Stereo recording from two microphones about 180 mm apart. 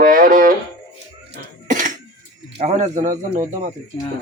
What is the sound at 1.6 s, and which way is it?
Cough, 45° right (ahead or behind).